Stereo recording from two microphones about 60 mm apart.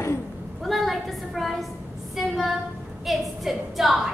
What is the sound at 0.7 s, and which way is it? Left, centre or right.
A woman's voice, centre.